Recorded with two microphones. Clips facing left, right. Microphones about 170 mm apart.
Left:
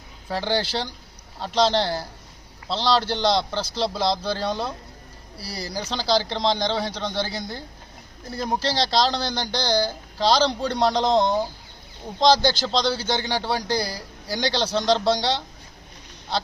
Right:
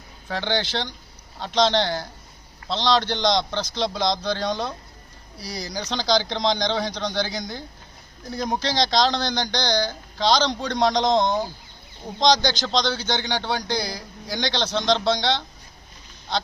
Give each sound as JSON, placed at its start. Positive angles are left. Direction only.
{"t": 0.3, "sound": "a man's voice", "side_deg": 5}
{"t": 5.7, "sound": "speech", "side_deg": 5}
{"t": 12.5, "sound": "a man's voice", "side_deg": 5}